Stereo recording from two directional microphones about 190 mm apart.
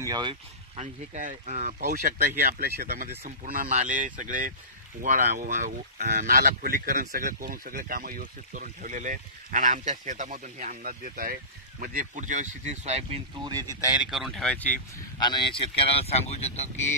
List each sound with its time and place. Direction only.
0.0 s speech: 20° right (ahead or behind)
0.7 s speech: 40° right (ahead or behind); by 3.1 s 55° right (ahead or behind)
3.3 s speech: 45° right (ahead or behind)
13.4 s speech: 20° right (ahead or behind)
13.8 s speech: 5° right (ahead or behind)
15.1 s speech: 25° left (ahead or behind)